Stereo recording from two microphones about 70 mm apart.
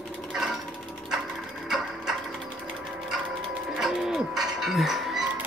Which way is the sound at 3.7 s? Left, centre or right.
Centre.